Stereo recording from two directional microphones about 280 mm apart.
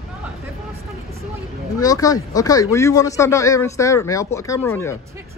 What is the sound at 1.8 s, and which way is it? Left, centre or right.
Speech, centre.